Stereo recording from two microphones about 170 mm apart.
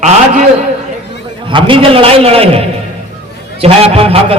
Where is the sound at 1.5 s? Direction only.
30° right (ahead or behind).